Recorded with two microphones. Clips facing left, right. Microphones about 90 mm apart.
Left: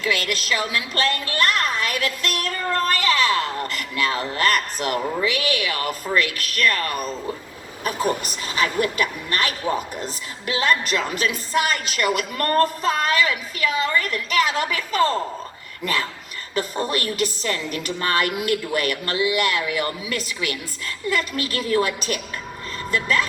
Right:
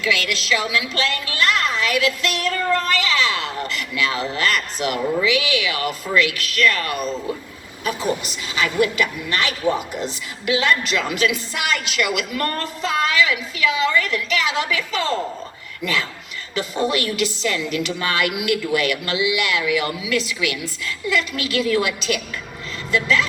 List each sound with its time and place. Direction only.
0.0 s a woman's voice: 40° left (ahead or behind)